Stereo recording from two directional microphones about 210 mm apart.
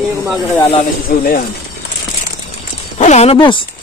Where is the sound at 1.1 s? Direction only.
45° left (ahead or behind).